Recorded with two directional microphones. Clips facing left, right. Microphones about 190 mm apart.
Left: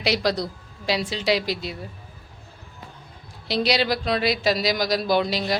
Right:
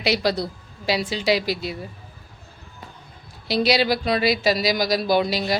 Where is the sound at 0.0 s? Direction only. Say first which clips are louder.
Right 1 dB; centre (ahead or behind).